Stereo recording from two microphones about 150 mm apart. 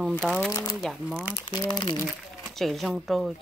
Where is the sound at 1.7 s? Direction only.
30° left (ahead or behind).